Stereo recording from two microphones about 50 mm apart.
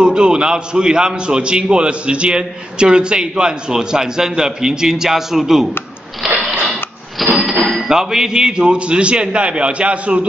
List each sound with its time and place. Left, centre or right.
0.0 s a man's voice: centre
6.6 s printer: centre
7.9 s a man's voice: centre